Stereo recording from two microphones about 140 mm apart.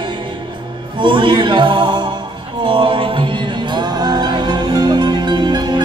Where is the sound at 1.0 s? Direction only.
35° right (ahead or behind).